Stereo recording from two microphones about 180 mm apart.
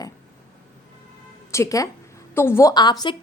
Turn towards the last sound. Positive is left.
turn(degrees=25)  # may be behind; listen again after turning